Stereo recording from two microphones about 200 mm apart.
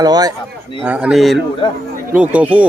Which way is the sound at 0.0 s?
20° right (ahead or behind).